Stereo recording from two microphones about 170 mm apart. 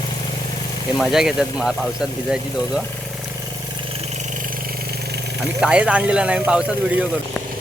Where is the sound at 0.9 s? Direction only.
Centre (ahead or behind).